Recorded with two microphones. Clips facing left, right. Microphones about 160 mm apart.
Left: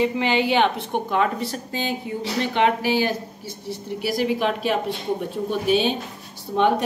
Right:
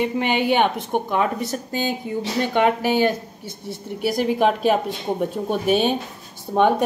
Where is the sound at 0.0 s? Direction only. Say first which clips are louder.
Even; 55° right (ahead or behind).